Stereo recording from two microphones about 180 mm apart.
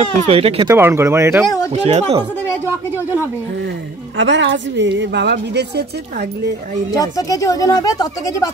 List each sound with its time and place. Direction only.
0.3 s speech: 35° right (ahead or behind)
0.7 s speech: 15° right (ahead or behind)
1.7 s speech: 35° right (ahead or behind)
4.2 s a woman's voice: 90° right; by 5.9 s 70° right (ahead or behind)
6.9 s speech: 20° left (ahead or behind)